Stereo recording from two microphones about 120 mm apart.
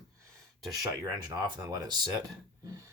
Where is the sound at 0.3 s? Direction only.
30° right (ahead or behind).